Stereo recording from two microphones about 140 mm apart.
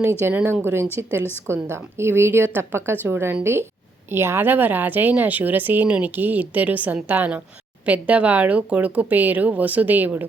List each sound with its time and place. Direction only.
0.0 s speech: 20° right (ahead or behind)
1.2 s a woman's voice: 15° left (ahead or behind)
1.7 s speech: 15° right (ahead or behind)